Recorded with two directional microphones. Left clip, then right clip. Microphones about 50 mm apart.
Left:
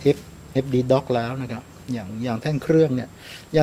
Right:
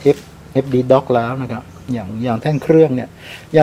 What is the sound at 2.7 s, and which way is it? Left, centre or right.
Speech, left.